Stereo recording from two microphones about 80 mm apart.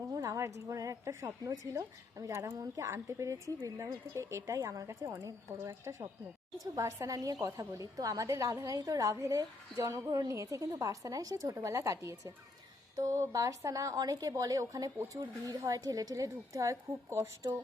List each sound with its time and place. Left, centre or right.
0.1 s a woman's voice: right